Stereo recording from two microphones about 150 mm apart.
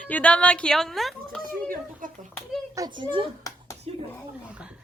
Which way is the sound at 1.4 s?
65° right (ahead or behind).